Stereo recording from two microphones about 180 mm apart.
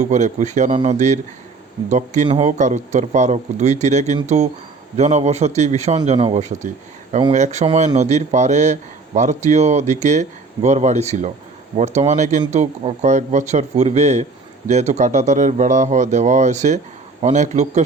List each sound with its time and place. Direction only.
0.0 s a man's voice: 40° right (ahead or behind)